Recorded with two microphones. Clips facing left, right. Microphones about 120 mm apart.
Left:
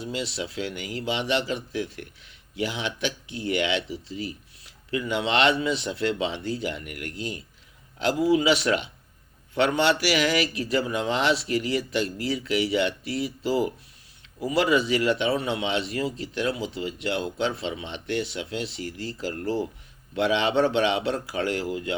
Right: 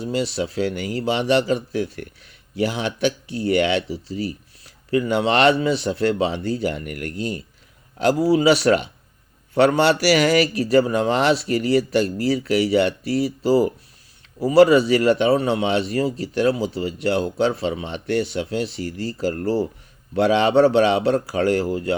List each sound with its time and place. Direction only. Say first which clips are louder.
0.0 s speech: right 8 dB; 40° right (ahead or behind)